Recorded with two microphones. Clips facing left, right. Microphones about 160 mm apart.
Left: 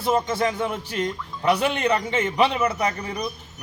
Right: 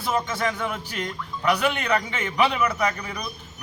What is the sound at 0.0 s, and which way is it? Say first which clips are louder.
Speech: left 3 dB; 30° left (ahead or behind).